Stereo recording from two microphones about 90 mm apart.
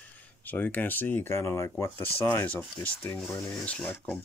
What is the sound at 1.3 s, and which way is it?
Speech, 35° left (ahead or behind).